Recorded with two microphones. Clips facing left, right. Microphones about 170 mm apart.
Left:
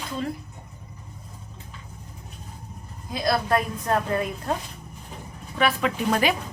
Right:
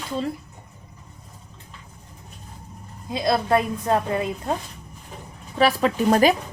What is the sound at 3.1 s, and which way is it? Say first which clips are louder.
A woman's voice: right 3 dB; 25° right (ahead or behind).